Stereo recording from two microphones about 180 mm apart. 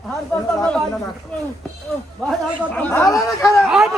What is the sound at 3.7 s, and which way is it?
Speech, centre (ahead or behind).